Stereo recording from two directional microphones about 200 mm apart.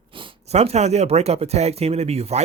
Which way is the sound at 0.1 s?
25° right (ahead or behind).